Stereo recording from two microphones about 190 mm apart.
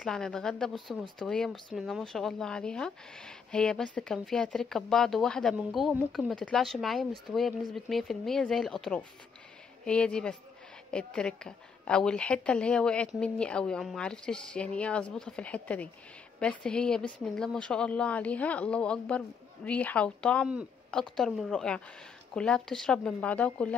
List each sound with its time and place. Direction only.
0.0 s a woman's voice: 5° left (ahead or behind)